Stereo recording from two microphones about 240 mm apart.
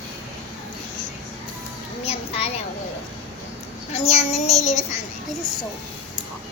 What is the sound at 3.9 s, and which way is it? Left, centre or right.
Child singing, left.